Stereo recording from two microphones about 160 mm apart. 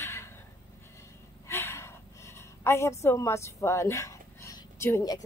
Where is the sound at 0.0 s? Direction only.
15° left (ahead or behind).